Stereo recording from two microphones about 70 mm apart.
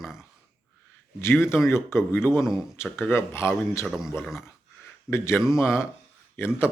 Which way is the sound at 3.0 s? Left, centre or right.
Left.